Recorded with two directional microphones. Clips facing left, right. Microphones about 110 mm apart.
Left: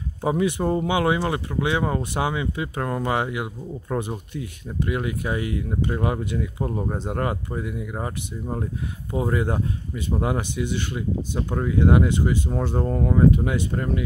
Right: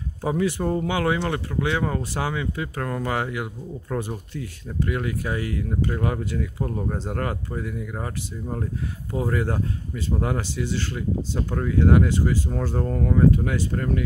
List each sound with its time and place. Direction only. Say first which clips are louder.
0.2 s speech: left 1 dB; 15° left (ahead or behind)